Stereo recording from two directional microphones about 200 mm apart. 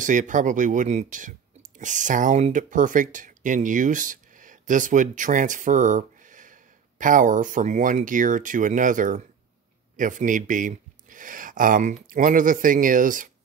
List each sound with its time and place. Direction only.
0.0 s speech: 40° right (ahead or behind)